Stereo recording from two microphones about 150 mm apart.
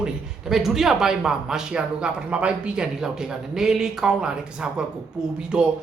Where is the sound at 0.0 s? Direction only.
Centre (ahead or behind).